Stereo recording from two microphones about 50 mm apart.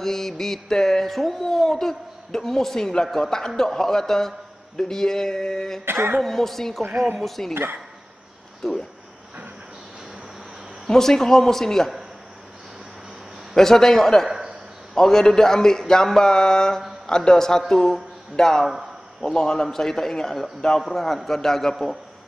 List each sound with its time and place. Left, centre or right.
0.0 s mantra: centre
5.9 s speech: right
6.2 s a man's voice: centre
8.6 s speech: centre
10.9 s mantra: centre
13.6 s mantra: centre
20.8 s a man's voice: centre